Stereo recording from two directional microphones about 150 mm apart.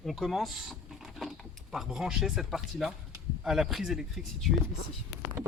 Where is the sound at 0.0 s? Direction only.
Centre (ahead or behind).